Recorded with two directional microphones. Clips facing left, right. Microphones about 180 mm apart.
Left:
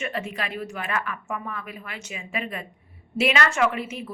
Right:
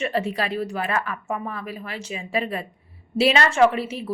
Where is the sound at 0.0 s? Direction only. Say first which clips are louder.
Right 6 dB; 35° right (ahead or behind).